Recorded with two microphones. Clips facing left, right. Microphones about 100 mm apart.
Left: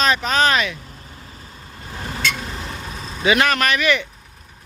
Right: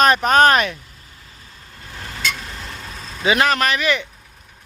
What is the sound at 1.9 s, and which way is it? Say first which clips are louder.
Vehicle: left 2 dB; 30° left (ahead or behind).